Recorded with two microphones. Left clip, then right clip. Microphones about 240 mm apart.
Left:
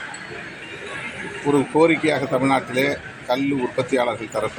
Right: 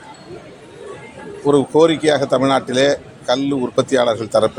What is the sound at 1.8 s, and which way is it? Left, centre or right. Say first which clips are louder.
Speech: right 3 dB; right.